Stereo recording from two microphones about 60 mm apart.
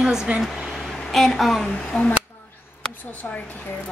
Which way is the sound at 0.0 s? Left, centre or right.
Centre.